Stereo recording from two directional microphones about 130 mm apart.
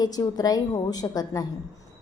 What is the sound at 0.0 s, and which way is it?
A woman's voice, 30° left (ahead or behind).